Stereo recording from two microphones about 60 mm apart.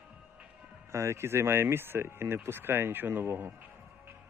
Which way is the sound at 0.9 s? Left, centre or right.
Right.